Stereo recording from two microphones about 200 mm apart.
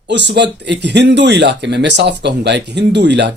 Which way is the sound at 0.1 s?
60° right (ahead or behind).